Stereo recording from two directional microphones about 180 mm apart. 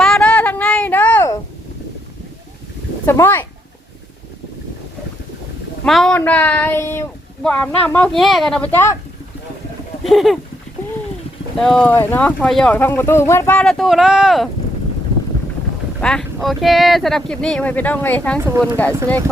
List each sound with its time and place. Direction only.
0.0 s a sound: 5° left (ahead or behind)
3.1 s speech: 15° left (ahead or behind)
5.8 s speech: 5° left (ahead or behind)
10.0 s speech: centre (ahead or behind)
11.5 s speech: 5° left (ahead or behind)
16.0 s speech: 5° left (ahead or behind)
18.3 s speech: 15° right (ahead or behind)